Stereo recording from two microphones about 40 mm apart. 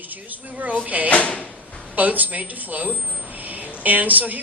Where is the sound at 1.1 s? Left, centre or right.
Left.